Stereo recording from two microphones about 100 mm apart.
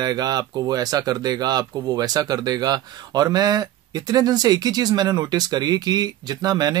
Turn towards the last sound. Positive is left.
turn(degrees=-40)  # may be behind; listen again after turning